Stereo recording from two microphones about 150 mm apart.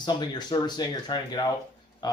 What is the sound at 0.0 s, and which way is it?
Speech, 30° left (ahead or behind).